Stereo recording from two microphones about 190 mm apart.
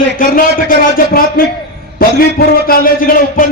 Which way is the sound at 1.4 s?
50° left (ahead or behind).